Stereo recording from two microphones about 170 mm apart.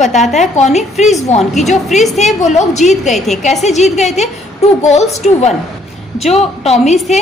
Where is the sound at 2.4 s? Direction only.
45° left (ahead or behind).